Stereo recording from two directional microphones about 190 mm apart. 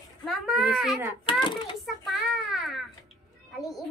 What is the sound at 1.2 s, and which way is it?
Speech, 25° left (ahead or behind).